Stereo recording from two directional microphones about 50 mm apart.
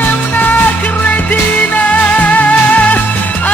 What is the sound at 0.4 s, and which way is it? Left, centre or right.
Music, left.